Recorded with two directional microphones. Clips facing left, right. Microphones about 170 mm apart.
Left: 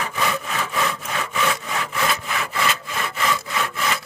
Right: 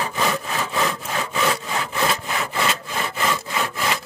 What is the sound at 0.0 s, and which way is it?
Sawing, 30° right (ahead or behind).